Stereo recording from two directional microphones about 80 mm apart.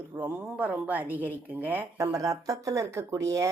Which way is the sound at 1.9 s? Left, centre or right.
Right.